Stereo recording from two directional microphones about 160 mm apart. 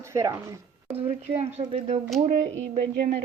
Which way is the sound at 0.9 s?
40° right (ahead or behind).